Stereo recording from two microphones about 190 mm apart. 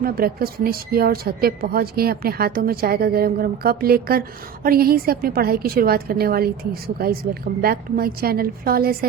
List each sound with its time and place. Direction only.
0.0 s a woman's voice: 50° right (ahead or behind)